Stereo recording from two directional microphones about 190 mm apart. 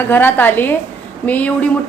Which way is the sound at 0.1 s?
10° left (ahead or behind).